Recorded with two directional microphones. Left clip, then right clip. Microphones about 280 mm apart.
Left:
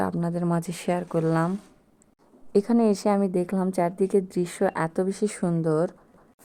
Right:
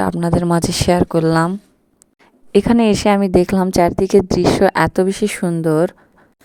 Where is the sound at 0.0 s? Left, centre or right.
Right.